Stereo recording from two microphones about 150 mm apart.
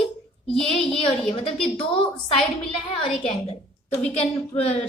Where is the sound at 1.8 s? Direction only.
35° left (ahead or behind).